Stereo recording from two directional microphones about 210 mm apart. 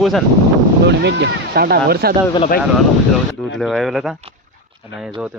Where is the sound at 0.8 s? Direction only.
55° right (ahead or behind).